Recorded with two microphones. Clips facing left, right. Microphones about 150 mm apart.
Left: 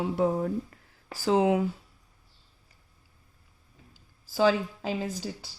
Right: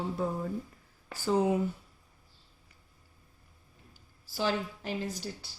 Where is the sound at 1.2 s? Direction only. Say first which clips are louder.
Left 4 dB; 90° left.